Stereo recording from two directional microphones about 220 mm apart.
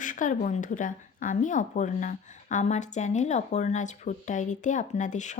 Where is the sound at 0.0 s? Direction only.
35° left (ahead or behind).